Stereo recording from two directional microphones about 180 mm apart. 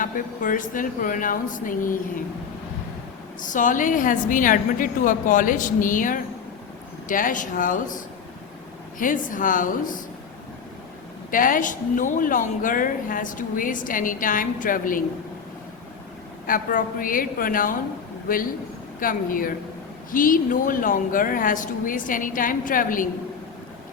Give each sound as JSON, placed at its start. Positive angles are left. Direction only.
{"t": 0.0, "sound": "speech", "side_deg": 50}
{"t": 3.4, "sound": "speech", "side_deg": 45}
{"t": 9.0, "sound": "speech", "side_deg": 50}
{"t": 11.3, "sound": "speech", "side_deg": 50}
{"t": 16.5, "sound": "speech", "side_deg": 50}
{"t": 18.9, "sound": "speech", "side_deg": 50}